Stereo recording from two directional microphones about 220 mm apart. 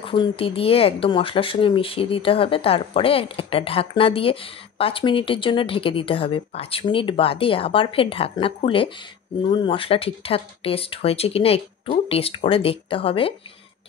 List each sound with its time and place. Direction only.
0.0 s speech: 25° left (ahead or behind)